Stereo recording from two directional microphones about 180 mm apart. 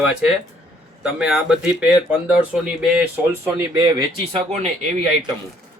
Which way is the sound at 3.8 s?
30° right (ahead or behind).